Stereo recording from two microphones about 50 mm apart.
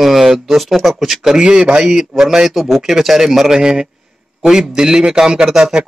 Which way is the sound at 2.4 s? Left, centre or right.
Centre.